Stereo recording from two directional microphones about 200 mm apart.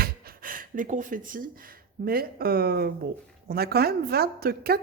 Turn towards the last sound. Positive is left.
turn(degrees=-50)  # may be behind; listen again after turning